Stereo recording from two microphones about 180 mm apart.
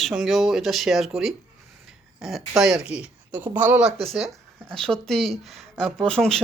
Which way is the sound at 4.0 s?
30° right (ahead or behind).